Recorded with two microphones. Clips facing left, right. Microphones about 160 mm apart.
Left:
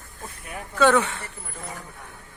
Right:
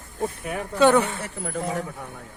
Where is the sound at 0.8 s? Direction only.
15° right (ahead or behind).